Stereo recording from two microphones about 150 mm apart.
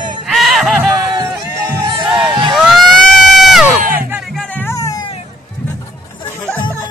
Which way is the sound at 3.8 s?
70° right (ahead or behind).